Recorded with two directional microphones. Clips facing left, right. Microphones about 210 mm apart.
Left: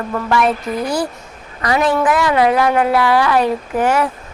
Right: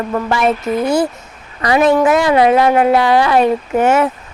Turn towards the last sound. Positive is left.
turn(degrees=-25)  # may be behind; listen again after turning